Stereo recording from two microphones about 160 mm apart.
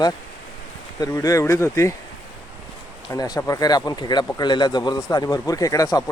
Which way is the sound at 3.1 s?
25° left (ahead or behind).